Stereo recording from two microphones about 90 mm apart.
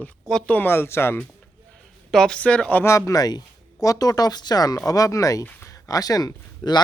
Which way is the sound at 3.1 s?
45° left (ahead or behind).